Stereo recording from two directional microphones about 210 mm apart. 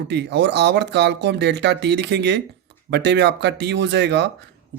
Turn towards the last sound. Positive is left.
turn(degrees=-55)  # may be behind; listen again after turning